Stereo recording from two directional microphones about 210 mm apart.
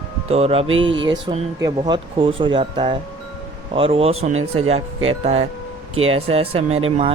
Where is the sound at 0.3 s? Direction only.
30° right (ahead or behind).